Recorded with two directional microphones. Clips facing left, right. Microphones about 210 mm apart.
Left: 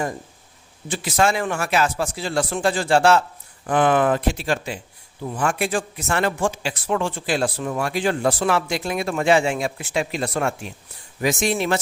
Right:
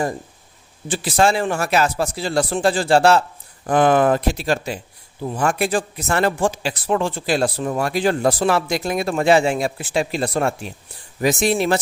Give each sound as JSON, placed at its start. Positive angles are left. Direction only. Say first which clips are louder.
{"t": 0.9, "sound": "speech", "louder": "right 3 dB", "side_deg": -35}